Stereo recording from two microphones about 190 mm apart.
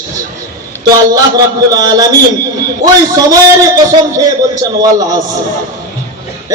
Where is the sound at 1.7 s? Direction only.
20° right (ahead or behind).